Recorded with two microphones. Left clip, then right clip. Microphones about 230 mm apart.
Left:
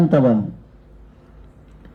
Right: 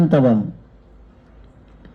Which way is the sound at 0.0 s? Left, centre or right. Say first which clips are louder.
Even; right.